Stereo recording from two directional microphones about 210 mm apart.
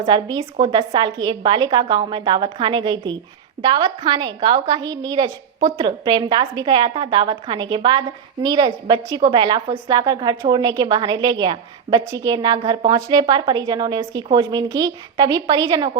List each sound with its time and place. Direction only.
0.0 s a woman's voice: 15° right (ahead or behind)